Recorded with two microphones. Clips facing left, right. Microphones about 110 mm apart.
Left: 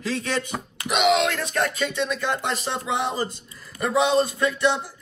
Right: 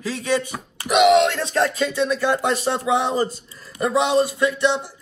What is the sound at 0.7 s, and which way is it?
Speech, 30° right (ahead or behind).